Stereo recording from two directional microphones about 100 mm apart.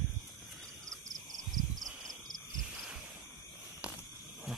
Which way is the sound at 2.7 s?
10° right (ahead or behind).